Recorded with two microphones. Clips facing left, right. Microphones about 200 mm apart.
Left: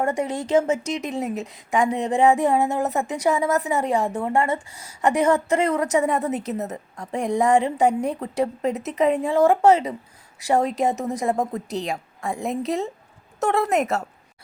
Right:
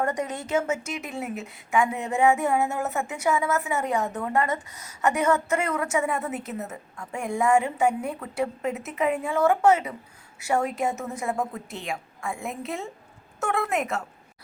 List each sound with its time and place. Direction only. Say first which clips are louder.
0.0 s a woman's voice: left 4 dB; 25° left (ahead or behind)